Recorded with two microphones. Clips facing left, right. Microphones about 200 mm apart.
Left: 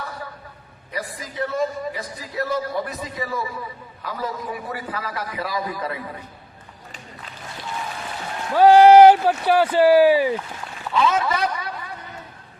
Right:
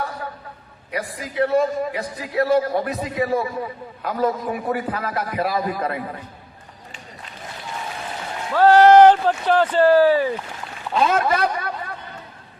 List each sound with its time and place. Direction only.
0.9 s a man's voice: 60° right (ahead or behind)
8.5 s speech: 10° left (ahead or behind)
11.0 s a man's voice: 55° right (ahead or behind)